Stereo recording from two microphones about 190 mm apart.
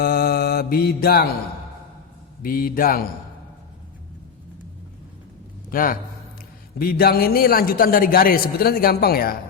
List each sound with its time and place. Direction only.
0.0 s mantra: 50° left (ahead or behind)
2.4 s a man's voice: 50° left (ahead or behind)
5.7 s a man's voice: 50° left (ahead or behind)